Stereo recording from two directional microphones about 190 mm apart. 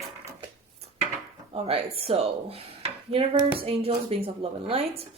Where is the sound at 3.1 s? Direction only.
30° right (ahead or behind).